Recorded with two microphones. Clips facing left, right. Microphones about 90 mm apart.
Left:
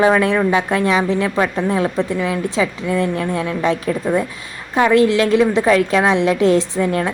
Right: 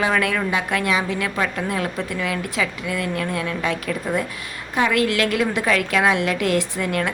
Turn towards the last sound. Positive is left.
turn(degrees=30)  # may be behind; listen again after turning